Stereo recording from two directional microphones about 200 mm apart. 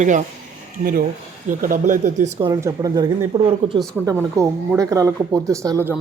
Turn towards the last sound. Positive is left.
turn(degrees=-15)  # may be behind; listen again after turning